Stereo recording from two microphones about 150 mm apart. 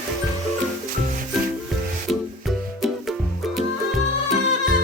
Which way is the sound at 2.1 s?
Centre (ahead or behind).